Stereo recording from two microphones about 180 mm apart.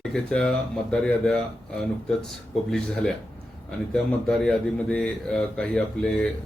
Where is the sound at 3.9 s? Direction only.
5° left (ahead or behind).